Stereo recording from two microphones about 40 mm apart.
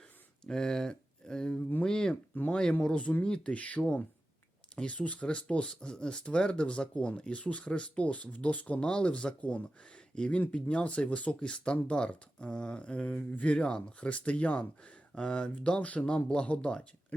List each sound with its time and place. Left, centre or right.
0.4 s speech: centre
2.8 s speech: left